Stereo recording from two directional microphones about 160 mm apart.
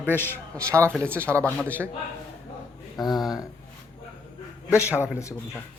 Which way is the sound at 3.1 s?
Centre (ahead or behind).